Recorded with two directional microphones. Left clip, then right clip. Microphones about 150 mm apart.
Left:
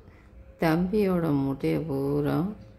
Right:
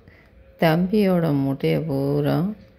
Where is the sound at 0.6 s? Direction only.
20° right (ahead or behind).